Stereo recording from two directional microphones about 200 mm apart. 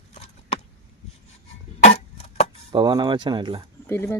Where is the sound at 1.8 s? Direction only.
30° left (ahead or behind).